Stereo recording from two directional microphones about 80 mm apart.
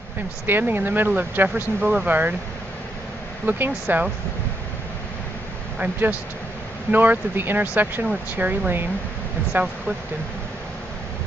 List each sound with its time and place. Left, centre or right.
0.4 s speech: right
3.4 s speech: right
5.8 s speech: right